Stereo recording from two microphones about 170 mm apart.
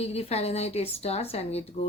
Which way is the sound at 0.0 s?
35° left (ahead or behind).